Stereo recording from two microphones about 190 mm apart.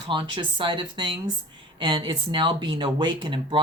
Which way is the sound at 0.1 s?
25° right (ahead or behind).